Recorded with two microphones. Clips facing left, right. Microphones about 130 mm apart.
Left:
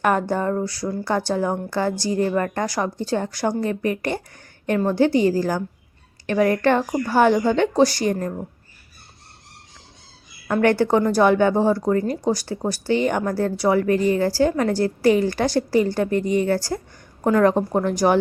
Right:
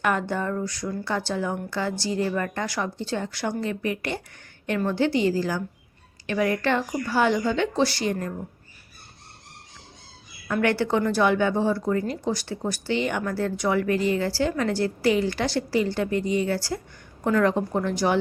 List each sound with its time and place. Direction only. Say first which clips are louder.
0.0 s a woman's voice: left 5 dB; 40° left (ahead or behind)
10.5 s a woman's voice: left 5 dB; 45° left (ahead or behind)